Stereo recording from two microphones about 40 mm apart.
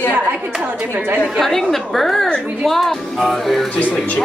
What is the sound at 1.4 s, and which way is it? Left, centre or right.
Speech, centre.